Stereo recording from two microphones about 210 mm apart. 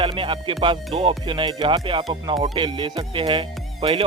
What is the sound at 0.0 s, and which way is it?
Music, 25° right (ahead or behind).